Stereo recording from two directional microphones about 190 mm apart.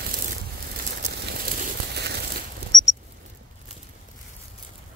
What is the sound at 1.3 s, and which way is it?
Crumpling, 60° right (ahead or behind).